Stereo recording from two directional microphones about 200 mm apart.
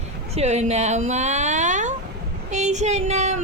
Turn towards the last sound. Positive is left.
turn(degrees=-35)  # may be behind; listen again after turning